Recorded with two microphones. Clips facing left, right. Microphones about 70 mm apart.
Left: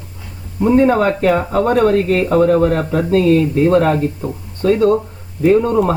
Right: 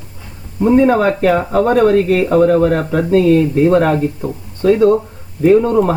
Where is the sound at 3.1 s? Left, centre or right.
Centre.